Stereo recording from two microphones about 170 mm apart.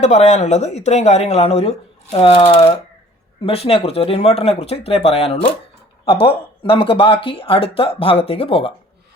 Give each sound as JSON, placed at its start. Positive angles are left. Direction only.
{"t": 0.0, "sound": "speech", "side_deg": 45}